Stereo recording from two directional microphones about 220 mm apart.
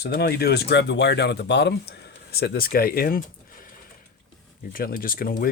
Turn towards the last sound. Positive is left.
turn(degrees=40)  # may be behind; listen again after turning